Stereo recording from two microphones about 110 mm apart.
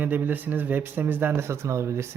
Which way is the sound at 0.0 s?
15° right (ahead or behind).